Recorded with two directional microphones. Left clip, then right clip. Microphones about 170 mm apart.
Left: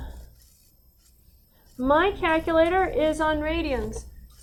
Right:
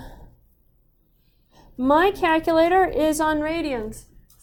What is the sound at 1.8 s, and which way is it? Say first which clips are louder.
A woman's voice: right 3 dB; 30° right (ahead or behind).